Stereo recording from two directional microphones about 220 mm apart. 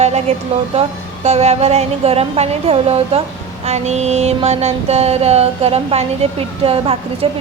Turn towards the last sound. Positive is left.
turn(degrees=-25)  # may be behind; listen again after turning